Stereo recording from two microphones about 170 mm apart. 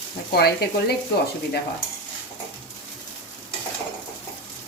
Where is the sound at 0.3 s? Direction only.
70° left (ahead or behind).